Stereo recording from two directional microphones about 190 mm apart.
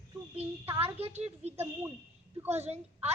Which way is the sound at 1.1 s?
35° right (ahead or behind).